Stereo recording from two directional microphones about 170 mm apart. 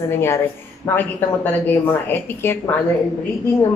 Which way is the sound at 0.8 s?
10° left (ahead or behind).